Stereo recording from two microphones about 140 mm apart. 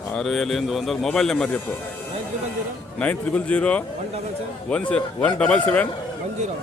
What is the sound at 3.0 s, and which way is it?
A man's voice, 10° left (ahead or behind).